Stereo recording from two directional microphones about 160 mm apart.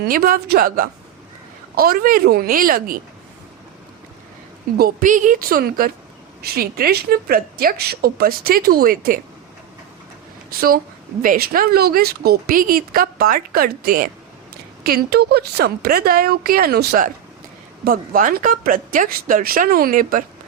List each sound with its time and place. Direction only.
0.0 s a woman's voice: 70° right (ahead or behind)
4.8 s a woman's voice: 65° right (ahead or behind)
11.2 s a woman's voice: 65° right (ahead or behind)